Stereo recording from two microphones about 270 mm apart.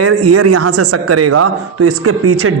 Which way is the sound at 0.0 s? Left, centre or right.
Right.